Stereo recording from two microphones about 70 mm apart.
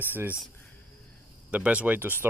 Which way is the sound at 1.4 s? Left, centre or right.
Centre.